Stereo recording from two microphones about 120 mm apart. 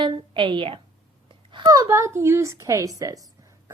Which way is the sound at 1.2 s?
45° right (ahead or behind).